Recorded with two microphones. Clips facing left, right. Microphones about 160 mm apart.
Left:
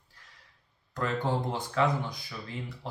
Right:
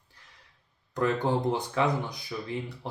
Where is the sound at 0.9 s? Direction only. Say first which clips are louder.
Right 4 dB; 15° right (ahead or behind).